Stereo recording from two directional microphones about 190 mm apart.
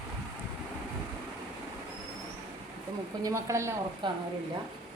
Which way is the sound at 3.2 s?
15° right (ahead or behind).